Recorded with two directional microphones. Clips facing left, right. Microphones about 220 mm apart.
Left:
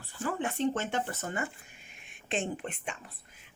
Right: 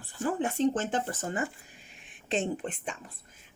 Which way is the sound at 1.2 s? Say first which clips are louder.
Right 3 dB; 30° right (ahead or behind).